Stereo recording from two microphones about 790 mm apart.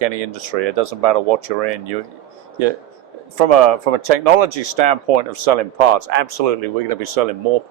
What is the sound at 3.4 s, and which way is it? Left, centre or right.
Speech, right.